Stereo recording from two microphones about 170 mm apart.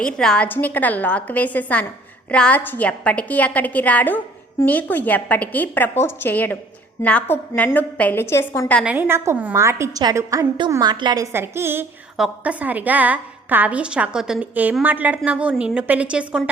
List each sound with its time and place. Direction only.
0.0 s a woman's voice: 5° left (ahead or behind)
8.8 s a woman's voice: 10° right (ahead or behind)